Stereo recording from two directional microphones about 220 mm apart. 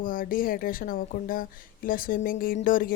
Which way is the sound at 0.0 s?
40° left (ahead or behind).